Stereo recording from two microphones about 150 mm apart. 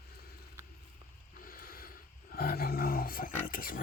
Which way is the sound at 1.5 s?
75° left (ahead or behind).